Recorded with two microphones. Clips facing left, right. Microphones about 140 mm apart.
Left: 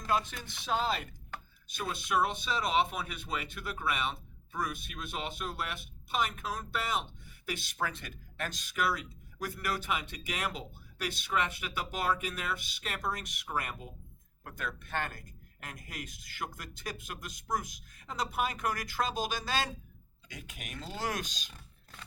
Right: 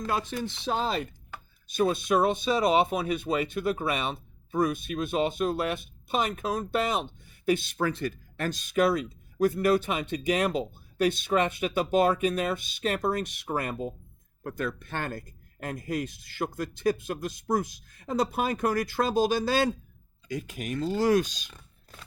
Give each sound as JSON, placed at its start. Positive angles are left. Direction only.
{"t": 0.1, "sound": "speech", "side_deg": -30}